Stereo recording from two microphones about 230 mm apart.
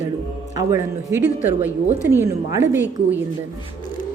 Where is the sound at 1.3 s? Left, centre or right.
Left.